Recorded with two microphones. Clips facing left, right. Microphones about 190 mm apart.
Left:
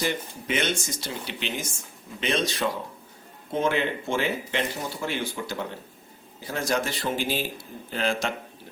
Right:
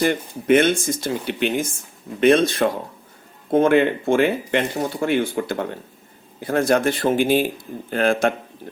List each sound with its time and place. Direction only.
0.0 s speech: 55° right (ahead or behind)